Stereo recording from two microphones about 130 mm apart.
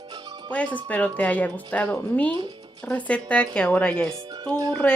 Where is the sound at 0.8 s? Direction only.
10° left (ahead or behind).